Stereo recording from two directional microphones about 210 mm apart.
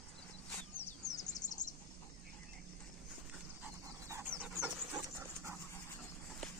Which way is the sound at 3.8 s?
15° right (ahead or behind).